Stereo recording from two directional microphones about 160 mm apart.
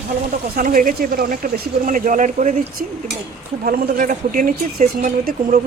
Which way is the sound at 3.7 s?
60° right (ahead or behind).